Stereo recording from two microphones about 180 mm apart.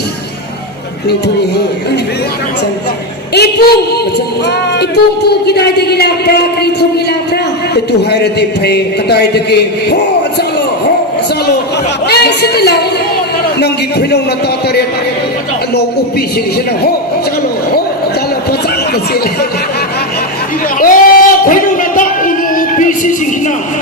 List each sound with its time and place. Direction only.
3.3 s a man's voice: 60° left (ahead or behind)
5.3 s a man's voice: 65° left (ahead or behind)
8.1 s a man's voice: 65° left (ahead or behind)
12.0 s chatter: 65° left (ahead or behind)
13.6 s a man's voice: 65° left (ahead or behind)
20.7 s a sound: 50° left (ahead or behind)